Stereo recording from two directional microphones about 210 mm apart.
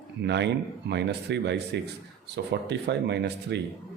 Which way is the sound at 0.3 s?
55° right (ahead or behind).